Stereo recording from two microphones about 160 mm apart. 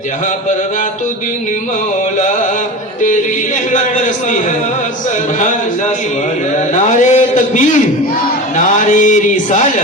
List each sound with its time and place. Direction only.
3.7 s speech: 50° left (ahead or behind)
6.7 s speech: 45° left (ahead or behind)